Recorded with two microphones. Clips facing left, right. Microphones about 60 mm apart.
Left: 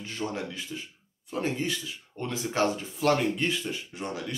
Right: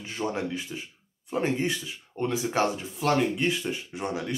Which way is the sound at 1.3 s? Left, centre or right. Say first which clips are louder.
Right 3 dB; right.